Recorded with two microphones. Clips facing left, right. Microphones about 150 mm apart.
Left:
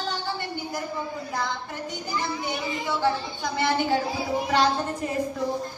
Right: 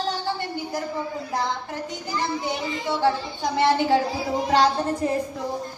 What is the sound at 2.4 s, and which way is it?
Speech, 30° right (ahead or behind).